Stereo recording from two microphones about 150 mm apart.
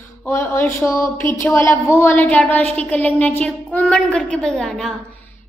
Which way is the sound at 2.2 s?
5° left (ahead or behind).